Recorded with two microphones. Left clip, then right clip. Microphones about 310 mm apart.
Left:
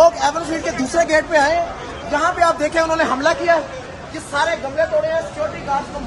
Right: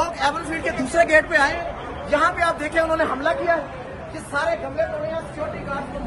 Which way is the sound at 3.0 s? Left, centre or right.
Left.